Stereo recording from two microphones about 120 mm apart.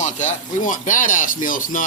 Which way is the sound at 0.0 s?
90° left.